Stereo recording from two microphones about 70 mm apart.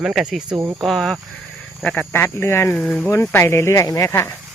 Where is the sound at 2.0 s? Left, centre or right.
Left.